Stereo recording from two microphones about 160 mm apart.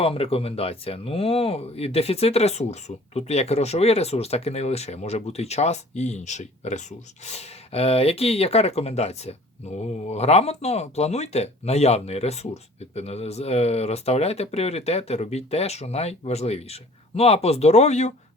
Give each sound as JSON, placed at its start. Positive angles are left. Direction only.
{"t": 0.0, "sound": "speech", "side_deg": 35}